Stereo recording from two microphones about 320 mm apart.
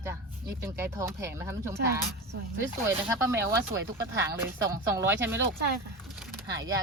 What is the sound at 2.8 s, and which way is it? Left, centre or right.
Speech, centre.